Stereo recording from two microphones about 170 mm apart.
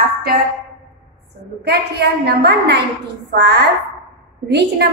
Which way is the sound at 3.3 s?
90° right.